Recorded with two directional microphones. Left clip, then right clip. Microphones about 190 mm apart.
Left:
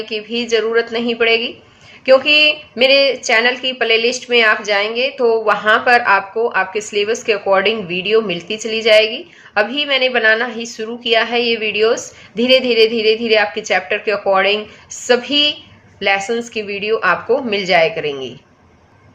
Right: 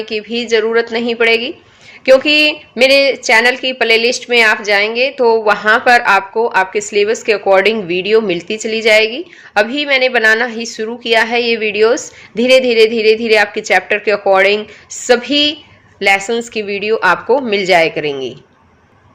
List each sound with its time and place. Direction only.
0.0 s a woman's voice: 45° right (ahead or behind)